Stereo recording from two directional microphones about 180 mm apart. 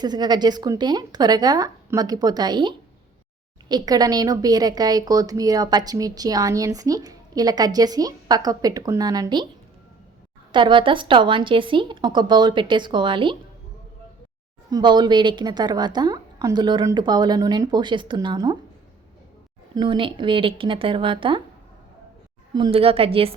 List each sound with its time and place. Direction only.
0.0 s speech: 25° right (ahead or behind)
10.5 s speech: 25° right (ahead or behind)
14.7 s speech: 25° right (ahead or behind)
19.7 s speech: 25° right (ahead or behind)
22.5 s a woman's voice: 30° right (ahead or behind)